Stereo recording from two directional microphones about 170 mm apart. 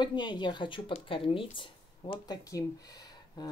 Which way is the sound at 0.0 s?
25° left (ahead or behind).